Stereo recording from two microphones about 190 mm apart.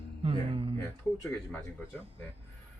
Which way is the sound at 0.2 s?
30° right (ahead or behind).